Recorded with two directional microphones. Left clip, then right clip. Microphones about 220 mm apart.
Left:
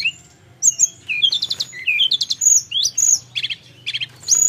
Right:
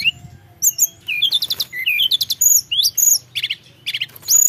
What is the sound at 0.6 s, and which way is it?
Chirp, 30° right (ahead or behind).